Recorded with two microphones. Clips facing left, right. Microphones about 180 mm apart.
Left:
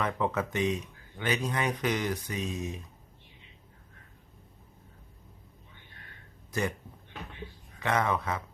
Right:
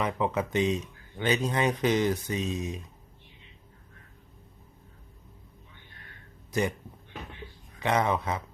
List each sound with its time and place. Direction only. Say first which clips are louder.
0.0 s speech: right 2 dB; 15° right (ahead or behind)
6.5 s a man's voice: right 3 dB; 20° right (ahead or behind)
7.8 s speech: right 2 dB; 20° right (ahead or behind)